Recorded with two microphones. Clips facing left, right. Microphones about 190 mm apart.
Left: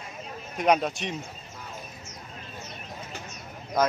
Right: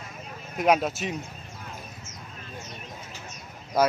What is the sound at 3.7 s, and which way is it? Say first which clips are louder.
Speech: right 2 dB; 10° right (ahead or behind).